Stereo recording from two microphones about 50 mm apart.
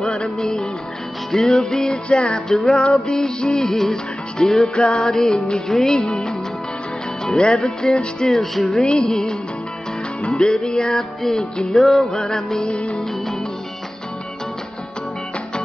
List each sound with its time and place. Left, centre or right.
0.0 s music: centre
1.3 s music: centre
4.7 s music: centre
12.1 s music: centre